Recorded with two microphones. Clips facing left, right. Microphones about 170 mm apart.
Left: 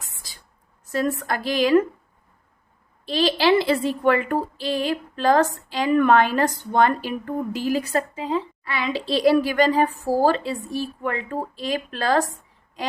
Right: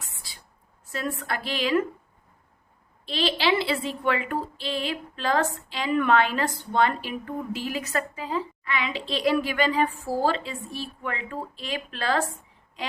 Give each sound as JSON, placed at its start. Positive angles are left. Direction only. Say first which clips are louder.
{"t": 0.2, "sound": "a sound", "louder": "left 1 dB", "side_deg": 40}
{"t": 0.9, "sound": "a woman's voice", "louder": "left 7 dB", "side_deg": 40}
{"t": 3.1, "sound": "a woman's voice", "louder": "left 6 dB", "side_deg": 40}